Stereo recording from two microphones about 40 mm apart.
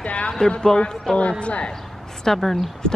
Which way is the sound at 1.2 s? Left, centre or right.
Left.